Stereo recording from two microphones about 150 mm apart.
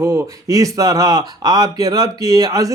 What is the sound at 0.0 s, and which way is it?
A man's voice, 20° right (ahead or behind).